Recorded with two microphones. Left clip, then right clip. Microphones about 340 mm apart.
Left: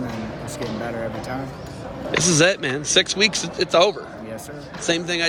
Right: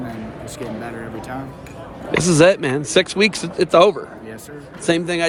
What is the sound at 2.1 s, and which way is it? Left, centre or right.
Speech, centre.